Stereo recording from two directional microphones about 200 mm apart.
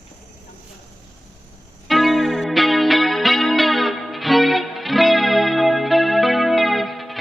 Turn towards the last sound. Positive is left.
turn(degrees=0)  # may be behind; listen again after turning